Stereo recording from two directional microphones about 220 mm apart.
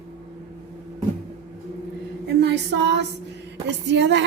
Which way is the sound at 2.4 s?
50° right (ahead or behind).